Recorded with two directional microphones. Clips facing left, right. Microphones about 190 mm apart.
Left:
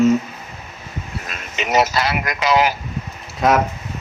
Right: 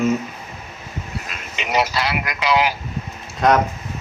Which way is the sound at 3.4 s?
5° left (ahead or behind).